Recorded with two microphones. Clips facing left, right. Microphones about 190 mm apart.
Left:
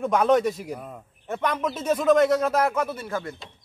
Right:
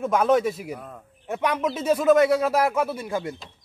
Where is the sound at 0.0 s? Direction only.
Centre (ahead or behind).